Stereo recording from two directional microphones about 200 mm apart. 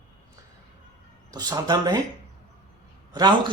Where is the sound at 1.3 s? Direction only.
20° right (ahead or behind).